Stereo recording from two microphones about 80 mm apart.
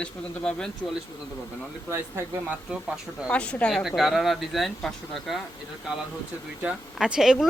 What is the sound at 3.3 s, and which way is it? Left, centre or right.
Speech, centre.